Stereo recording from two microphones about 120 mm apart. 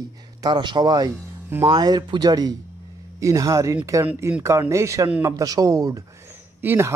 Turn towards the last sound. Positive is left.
turn(degrees=-20)  # may be behind; listen again after turning